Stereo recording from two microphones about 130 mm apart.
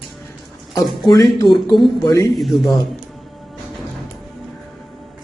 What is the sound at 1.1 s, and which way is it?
Speech, 30° left (ahead or behind).